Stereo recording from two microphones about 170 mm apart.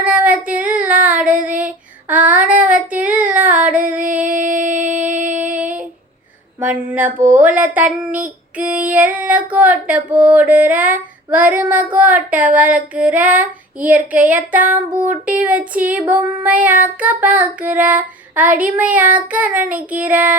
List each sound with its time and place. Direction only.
0.0 s child singing: 10° right (ahead or behind)
4.3 s music: 50° right (ahead or behind)
4.9 s music: 10° right (ahead or behind)
5.1 s music: 50° right (ahead or behind)
5.4 s a sound: 10° right (ahead or behind)
6.6 s female singing: 10° right (ahead or behind)